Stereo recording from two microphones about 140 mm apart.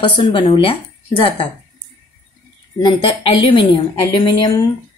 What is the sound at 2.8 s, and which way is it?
Speech, 40° left (ahead or behind).